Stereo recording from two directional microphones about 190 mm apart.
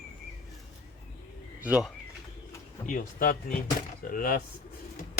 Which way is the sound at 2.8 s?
45° left (ahead or behind).